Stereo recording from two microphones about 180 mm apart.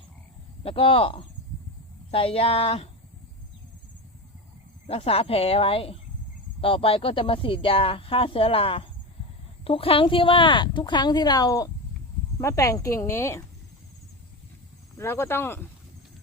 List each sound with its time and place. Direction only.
0.6 s speech: 30° left (ahead or behind)
4.9 s speech: 35° left (ahead or behind); by 13.4 s 15° left (ahead or behind)
14.9 s speech: 15° left (ahead or behind)